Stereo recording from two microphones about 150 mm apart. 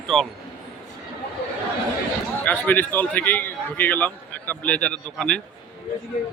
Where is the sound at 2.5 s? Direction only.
10° left (ahead or behind).